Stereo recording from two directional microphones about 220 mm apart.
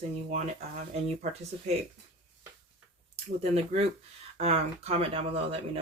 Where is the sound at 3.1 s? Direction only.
25° right (ahead or behind).